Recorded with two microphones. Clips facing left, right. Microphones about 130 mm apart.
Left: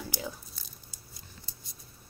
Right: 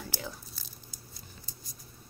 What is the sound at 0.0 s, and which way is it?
Tearing, 5° left (ahead or behind).